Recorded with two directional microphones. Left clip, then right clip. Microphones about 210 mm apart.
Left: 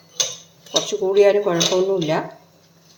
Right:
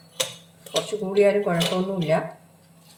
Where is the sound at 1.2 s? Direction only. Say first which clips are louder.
Left 4 dB; 25° left (ahead or behind).